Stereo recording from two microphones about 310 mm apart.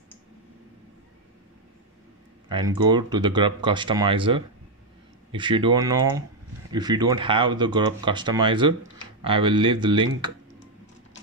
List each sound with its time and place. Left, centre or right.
2.4 s speech: centre